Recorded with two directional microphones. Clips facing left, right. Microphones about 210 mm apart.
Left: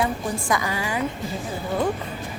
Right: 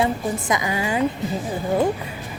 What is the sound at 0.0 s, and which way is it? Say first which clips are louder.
A woman's voice: right 3 dB; 20° right (ahead or behind).